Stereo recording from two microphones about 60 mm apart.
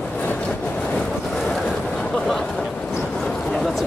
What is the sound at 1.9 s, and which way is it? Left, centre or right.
Vehicle, centre.